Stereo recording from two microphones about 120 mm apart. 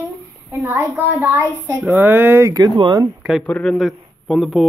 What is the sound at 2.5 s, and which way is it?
Speech, 35° right (ahead or behind).